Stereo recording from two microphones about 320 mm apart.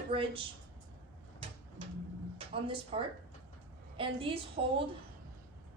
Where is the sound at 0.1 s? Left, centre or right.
Centre.